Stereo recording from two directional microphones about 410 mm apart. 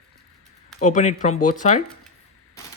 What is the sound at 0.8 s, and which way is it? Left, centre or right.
Speech, centre.